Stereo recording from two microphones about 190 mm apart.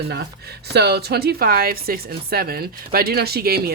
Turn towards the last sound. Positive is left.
turn(degrees=-55)  # may be behind; listen again after turning